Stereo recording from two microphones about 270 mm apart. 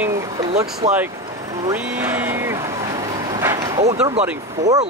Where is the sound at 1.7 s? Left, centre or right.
Centre.